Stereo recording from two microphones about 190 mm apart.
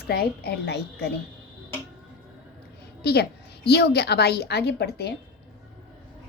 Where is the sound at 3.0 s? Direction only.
60° left (ahead or behind).